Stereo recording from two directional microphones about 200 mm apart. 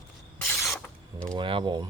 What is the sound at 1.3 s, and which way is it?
Speech, 25° right (ahead or behind).